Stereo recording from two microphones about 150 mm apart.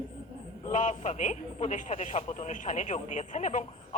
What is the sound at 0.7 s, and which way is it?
Speech, 55° left (ahead or behind).